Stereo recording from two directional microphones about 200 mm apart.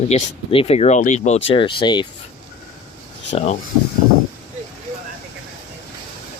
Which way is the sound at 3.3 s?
35° left (ahead or behind).